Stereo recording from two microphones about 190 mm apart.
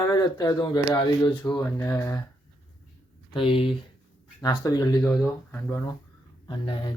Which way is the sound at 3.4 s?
25° left (ahead or behind).